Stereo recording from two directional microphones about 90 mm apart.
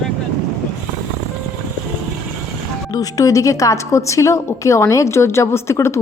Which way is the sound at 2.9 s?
40° left (ahead or behind).